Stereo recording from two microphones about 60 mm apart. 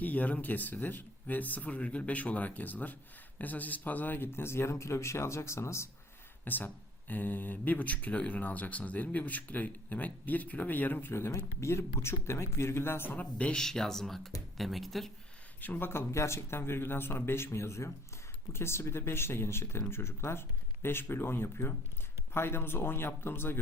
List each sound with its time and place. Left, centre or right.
0.0 s speech: left
6.4 s speech: left
11.1 s speech: left
13.1 s speech: left
13.6 s speech: centre
15.6 s speech: left
15.9 s speech: left